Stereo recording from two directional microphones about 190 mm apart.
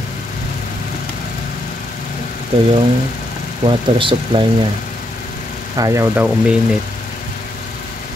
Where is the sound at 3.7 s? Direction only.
25° right (ahead or behind).